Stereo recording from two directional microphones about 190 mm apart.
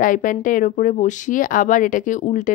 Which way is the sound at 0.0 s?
45° left (ahead or behind).